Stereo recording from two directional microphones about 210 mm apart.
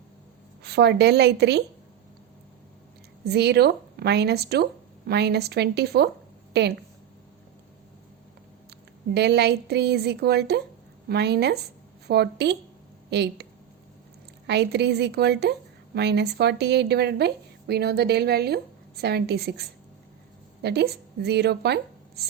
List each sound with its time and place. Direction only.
0.6 s a woman's voice: 50° right (ahead or behind)
3.2 s a woman's voice: 50° right (ahead or behind)
9.1 s a woman's voice: 50° right (ahead or behind)